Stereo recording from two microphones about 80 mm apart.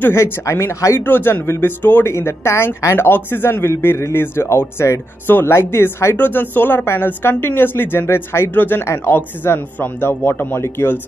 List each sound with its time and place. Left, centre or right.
0.0 s speech: left
1.0 s speech: left